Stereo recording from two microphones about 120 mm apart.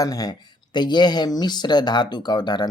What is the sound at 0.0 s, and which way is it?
Speech, 30° left (ahead or behind).